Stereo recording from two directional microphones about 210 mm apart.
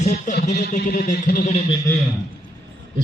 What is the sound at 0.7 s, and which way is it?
Speech, 45° left (ahead or behind).